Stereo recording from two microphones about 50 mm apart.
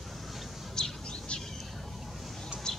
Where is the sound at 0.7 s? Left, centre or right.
Centre.